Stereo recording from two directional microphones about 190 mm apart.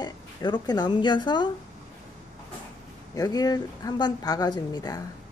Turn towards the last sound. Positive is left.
turn(degrees=20)  # may be behind; listen again after turning